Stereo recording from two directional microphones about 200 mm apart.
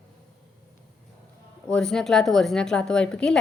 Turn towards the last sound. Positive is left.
turn(degrees=5)  # may be behind; listen again after turning